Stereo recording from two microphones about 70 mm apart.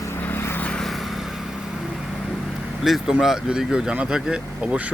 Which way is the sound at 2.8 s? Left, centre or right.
Centre.